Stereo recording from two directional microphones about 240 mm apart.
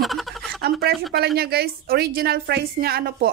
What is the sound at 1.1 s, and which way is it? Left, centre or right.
A woman's voice, right.